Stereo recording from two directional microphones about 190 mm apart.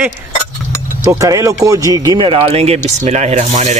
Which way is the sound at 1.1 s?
15° right (ahead or behind).